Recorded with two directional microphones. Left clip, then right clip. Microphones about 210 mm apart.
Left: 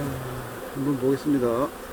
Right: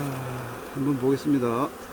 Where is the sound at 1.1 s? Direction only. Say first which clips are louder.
Left 1 dB; 40° right (ahead or behind).